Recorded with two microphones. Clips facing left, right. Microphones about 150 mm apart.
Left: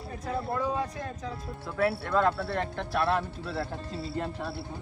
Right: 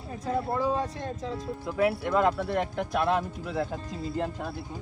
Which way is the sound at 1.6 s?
15° right (ahead or behind).